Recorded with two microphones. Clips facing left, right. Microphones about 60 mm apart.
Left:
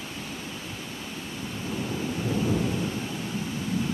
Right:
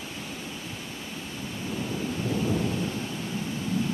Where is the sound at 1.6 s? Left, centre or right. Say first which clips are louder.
Even; centre.